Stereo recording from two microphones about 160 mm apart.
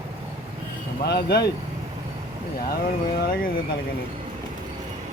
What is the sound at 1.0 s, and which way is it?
Speech, 90° left.